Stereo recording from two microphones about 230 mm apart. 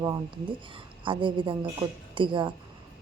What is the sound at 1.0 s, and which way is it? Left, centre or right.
A woman's voice, right.